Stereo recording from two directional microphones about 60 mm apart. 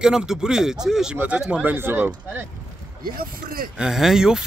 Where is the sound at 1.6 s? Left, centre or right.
Right.